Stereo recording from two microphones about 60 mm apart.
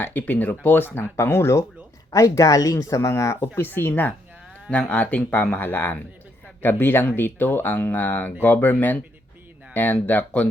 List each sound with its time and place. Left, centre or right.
0.0 s speech: left
0.9 s speech: left
2.0 s speech: left
2.7 s speech: left
3.5 s speech: left
4.7 s speech: left